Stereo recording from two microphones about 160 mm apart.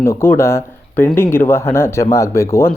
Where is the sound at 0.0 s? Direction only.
15° left (ahead or behind).